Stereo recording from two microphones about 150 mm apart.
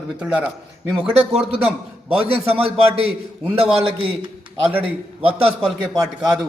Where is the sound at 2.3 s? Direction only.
40° right (ahead or behind).